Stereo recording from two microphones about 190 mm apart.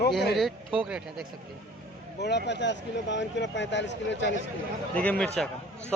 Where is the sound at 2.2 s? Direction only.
60° left (ahead or behind).